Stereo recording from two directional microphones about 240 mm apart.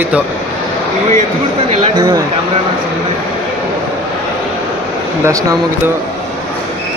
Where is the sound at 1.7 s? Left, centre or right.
Centre.